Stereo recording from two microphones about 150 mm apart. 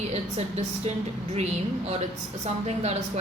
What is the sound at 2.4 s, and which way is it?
Speech, 45° right (ahead or behind).